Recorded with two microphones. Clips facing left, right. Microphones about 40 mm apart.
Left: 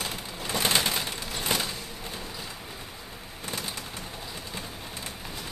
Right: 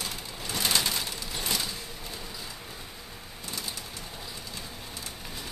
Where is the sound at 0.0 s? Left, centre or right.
Left.